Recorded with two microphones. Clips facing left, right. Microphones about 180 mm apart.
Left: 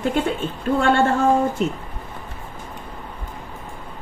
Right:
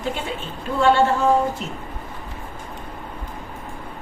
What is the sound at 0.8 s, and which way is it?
Speech, 50° left (ahead or behind).